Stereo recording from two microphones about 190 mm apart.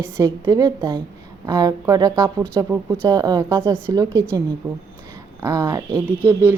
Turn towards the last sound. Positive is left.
turn(degrees=-10)  # may be behind; listen again after turning